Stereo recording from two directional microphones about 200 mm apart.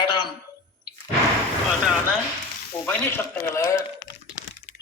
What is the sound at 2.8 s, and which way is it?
A man's voice, 10° left (ahead or behind).